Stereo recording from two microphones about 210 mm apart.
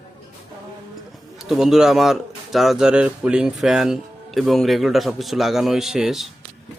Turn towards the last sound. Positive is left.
turn(degrees=0)  # may be behind; listen again after turning